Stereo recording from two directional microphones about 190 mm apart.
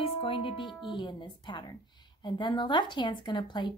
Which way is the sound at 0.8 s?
25° left (ahead or behind).